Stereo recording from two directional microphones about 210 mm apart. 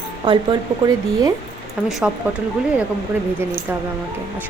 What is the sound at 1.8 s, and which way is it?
Speech, centre (ahead or behind).